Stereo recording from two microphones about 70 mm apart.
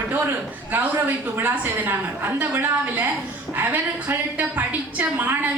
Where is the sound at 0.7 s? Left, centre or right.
Right.